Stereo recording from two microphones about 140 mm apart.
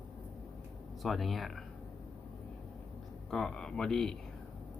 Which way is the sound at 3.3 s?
5° left (ahead or behind).